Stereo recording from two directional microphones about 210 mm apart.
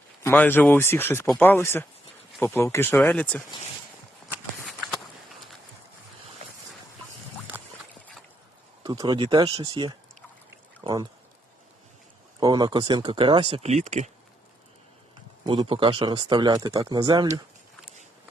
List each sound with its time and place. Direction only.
0.2 s speech: 10° left (ahead or behind)
8.8 s speech: 20° right (ahead or behind)
12.4 s speech: 20° right (ahead or behind)
15.4 s speech: 25° right (ahead or behind)